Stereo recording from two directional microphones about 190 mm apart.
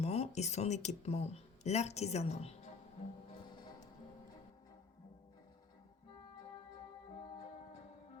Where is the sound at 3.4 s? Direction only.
25° left (ahead or behind).